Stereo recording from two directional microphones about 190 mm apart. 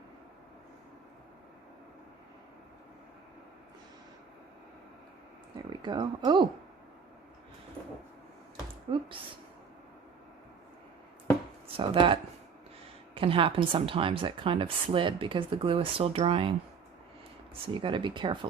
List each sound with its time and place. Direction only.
5.8 s speech: 20° right (ahead or behind)
11.8 s speech: 25° right (ahead or behind)
13.1 s speech: 30° right (ahead or behind)
17.7 s speech: 25° right (ahead or behind)